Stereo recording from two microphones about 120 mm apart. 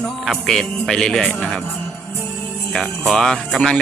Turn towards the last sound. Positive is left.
turn(degrees=5)  # may be behind; listen again after turning